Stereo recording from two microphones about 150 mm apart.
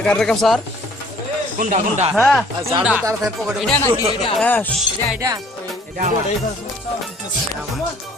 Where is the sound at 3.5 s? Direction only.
Centre (ahead or behind).